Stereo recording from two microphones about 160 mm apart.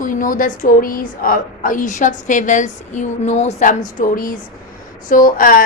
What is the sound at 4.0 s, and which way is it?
A woman's voice, 60° left (ahead or behind).